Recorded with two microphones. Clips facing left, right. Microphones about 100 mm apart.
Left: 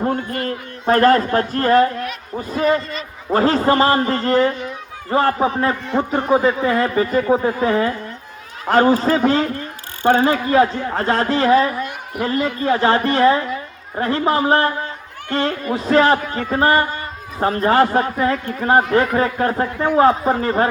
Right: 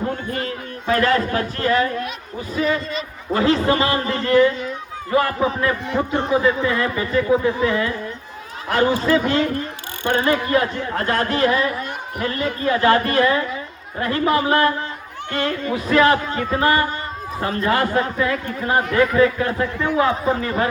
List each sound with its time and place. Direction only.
0.4 s a man's voice: 45° left (ahead or behind)
3.3 s speech: 40° left (ahead or behind)